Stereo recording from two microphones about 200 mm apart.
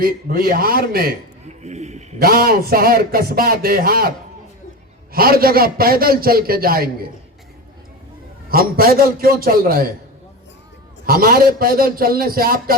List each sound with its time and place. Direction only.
0.0 s speech: 50° right (ahead or behind)
1.6 s a sound: 35° right (ahead or behind)
2.1 s speech: 50° right (ahead or behind)
5.1 s speech: 50° right (ahead or behind)
8.4 s speech: 45° right (ahead or behind)
11.0 s speech: 50° right (ahead or behind)